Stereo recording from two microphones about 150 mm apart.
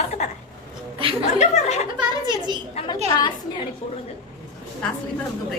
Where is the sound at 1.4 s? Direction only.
50° left (ahead or behind).